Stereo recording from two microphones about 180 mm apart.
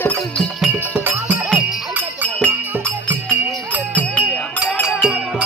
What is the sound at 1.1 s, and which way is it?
Music, 10° right (ahead or behind).